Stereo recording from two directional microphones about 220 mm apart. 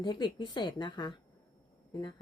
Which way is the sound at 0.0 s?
20° left (ahead or behind).